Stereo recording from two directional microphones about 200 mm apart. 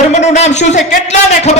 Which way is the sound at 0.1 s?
35° left (ahead or behind).